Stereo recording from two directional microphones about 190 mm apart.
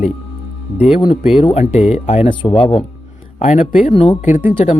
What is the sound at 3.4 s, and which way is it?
Speech, 45° left (ahead or behind).